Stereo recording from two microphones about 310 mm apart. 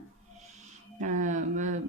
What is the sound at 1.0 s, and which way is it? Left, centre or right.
Speech, right.